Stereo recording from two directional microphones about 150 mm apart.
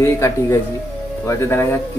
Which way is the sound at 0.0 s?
20° left (ahead or behind).